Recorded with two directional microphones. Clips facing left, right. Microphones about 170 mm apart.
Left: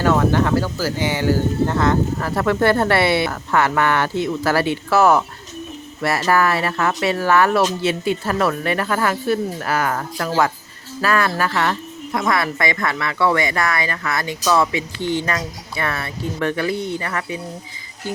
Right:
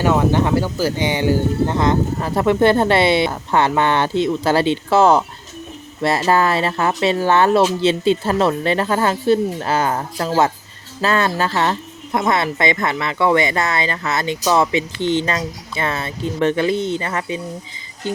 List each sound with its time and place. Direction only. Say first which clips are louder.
0.0 s speech: right 1 dB; 15° right (ahead or behind)